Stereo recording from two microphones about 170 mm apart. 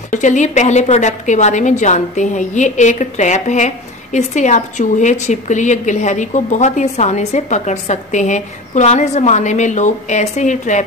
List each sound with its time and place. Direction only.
0.1 s a woman's voice: 45° left (ahead or behind)